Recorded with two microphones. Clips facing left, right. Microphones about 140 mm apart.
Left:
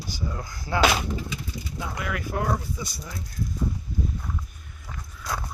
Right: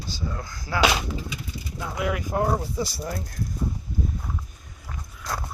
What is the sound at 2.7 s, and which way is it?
Speech, 50° right (ahead or behind).